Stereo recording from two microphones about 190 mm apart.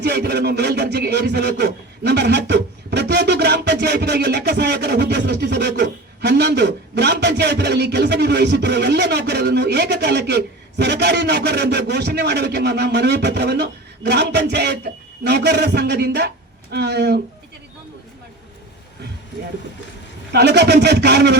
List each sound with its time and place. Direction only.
0.0 s speech: 60° right (ahead or behind)
20.3 s speech: 60° right (ahead or behind)